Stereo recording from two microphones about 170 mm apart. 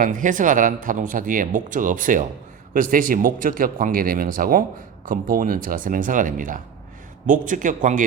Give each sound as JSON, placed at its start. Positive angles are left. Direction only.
{"t": 0.0, "sound": "speech", "side_deg": -50}